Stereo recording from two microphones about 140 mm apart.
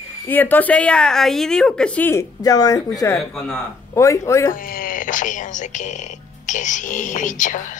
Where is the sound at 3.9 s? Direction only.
20° left (ahead or behind).